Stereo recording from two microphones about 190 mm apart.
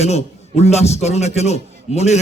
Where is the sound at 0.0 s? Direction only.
35° left (ahead or behind).